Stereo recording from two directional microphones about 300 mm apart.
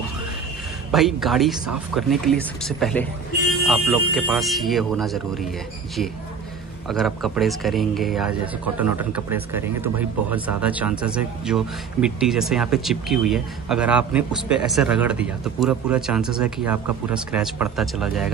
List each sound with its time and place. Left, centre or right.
0.9 s speech: centre
6.9 s speech: centre